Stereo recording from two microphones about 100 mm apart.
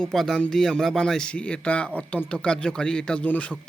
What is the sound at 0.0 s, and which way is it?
A man's voice, 5° left (ahead or behind).